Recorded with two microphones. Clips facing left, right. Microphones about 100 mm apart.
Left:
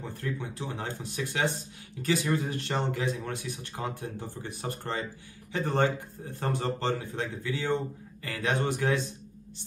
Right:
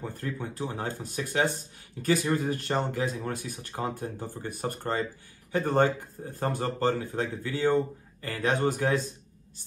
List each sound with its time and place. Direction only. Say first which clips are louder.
0.0 s speech: right 1 dB; 45° right (ahead or behind)